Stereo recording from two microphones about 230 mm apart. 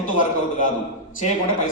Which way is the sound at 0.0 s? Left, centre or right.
Left.